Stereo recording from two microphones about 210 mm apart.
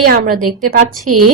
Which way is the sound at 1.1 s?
90° right.